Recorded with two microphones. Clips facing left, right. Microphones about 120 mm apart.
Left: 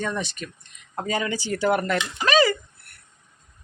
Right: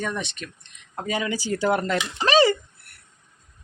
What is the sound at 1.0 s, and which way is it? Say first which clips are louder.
Speech: even; 10° right (ahead or behind).